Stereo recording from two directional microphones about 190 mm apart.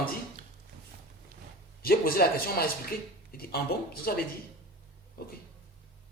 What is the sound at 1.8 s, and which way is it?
Speech, 50° left (ahead or behind).